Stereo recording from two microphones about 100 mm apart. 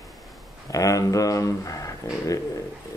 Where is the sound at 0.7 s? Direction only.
35° left (ahead or behind).